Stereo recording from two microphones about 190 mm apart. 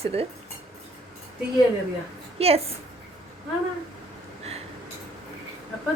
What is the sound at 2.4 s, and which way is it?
Speech, 30° right (ahead or behind).